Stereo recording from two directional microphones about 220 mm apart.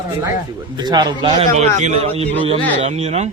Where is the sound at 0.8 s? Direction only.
20° right (ahead or behind).